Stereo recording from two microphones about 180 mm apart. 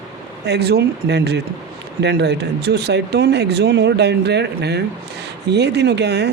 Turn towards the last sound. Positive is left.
turn(degrees=-70)  # may be behind; listen again after turning